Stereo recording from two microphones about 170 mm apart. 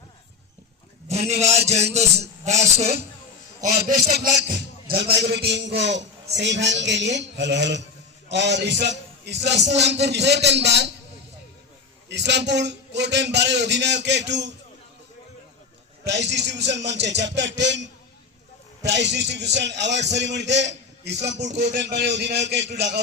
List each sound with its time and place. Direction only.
1.1 s a sound: 40° right (ahead or behind)
3.8 s a man's voice: 55° right (ahead or behind); by 10.9 s 90° right
12.0 s a man's voice: 90° right
16.0 s a man's voice: 90° right